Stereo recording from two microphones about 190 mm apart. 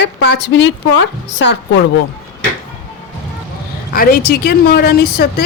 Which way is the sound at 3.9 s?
50° left (ahead or behind).